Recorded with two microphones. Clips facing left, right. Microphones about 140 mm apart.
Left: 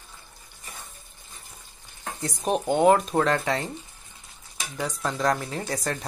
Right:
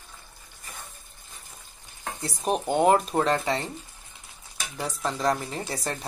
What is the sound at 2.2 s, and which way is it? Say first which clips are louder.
Speech: left 2 dB; centre (ahead or behind).